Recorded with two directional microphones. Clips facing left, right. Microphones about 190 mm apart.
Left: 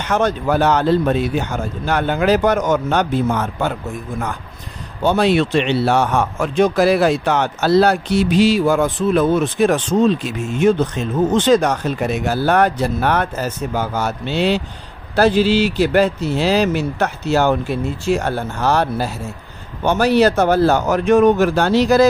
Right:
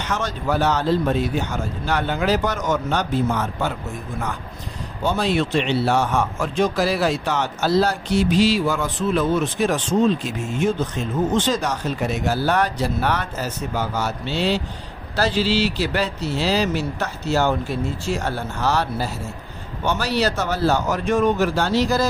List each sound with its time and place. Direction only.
0.0 s a man's voice: 55° left (ahead or behind)
5.0 s a man's voice: 70° left (ahead or behind)
10.6 s speech: 75° left (ahead or behind)
11.3 s a man's voice: 65° left (ahead or behind)